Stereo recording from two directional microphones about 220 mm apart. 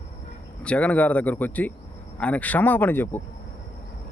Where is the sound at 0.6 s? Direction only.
5° left (ahead or behind).